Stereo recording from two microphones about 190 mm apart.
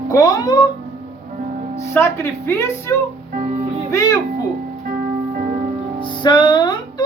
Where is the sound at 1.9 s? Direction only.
15° left (ahead or behind).